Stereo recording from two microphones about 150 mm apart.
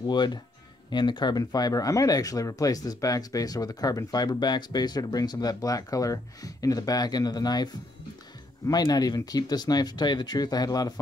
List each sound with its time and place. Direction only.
0.0 s speech: 30° left (ahead or behind)